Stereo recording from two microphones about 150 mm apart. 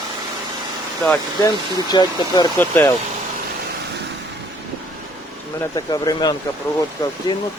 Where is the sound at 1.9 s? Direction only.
25° left (ahead or behind).